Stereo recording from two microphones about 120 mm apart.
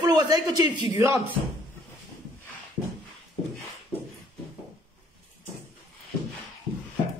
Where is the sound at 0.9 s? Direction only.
25° right (ahead or behind).